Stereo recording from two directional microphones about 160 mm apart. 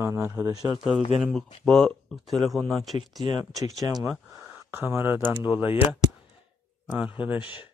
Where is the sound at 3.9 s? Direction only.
5° right (ahead or behind).